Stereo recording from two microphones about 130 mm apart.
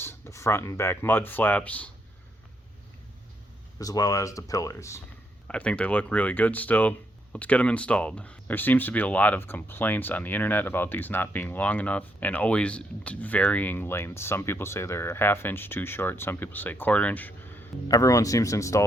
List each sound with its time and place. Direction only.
0.0 s speech: 20° left (ahead or behind)
3.8 s speech: 30° left (ahead or behind)
5.5 s speech: 10° left (ahead or behind)
17.8 s speech: 25° left (ahead or behind)